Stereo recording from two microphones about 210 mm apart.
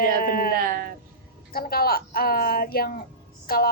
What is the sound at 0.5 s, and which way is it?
Speech, 45° right (ahead or behind).